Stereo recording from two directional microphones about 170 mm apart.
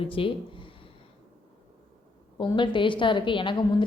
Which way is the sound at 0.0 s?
30° left (ahead or behind).